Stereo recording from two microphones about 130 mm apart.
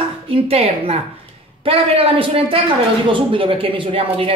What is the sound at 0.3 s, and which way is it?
Speech, 50° right (ahead or behind).